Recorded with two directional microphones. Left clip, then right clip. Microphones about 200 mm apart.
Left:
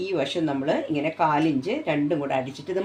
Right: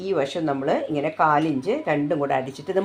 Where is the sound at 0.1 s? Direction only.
30° right (ahead or behind).